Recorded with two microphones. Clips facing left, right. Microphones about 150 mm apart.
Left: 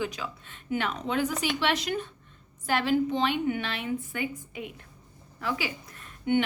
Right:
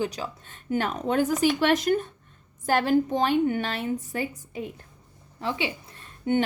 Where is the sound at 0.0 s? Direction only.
35° right (ahead or behind).